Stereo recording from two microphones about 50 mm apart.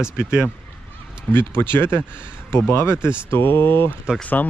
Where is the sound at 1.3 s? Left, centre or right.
Left.